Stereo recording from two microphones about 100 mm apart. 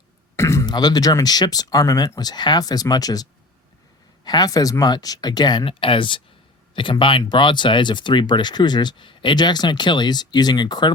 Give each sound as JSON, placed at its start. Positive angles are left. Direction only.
{"t": 0.3, "sound": "a sound", "side_deg": 30}
{"t": 0.6, "sound": "speech", "side_deg": 45}
{"t": 5.6, "sound": "speech", "side_deg": 60}